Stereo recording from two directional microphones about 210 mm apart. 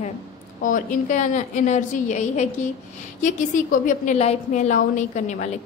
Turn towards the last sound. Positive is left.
turn(degrees=35)  # may be behind; listen again after turning